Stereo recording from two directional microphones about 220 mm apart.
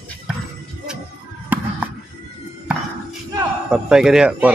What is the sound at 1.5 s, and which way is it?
Basketball bounce, 10° right (ahead or behind).